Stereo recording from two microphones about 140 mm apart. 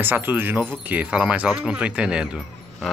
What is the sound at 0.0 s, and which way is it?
Speech, 15° right (ahead or behind).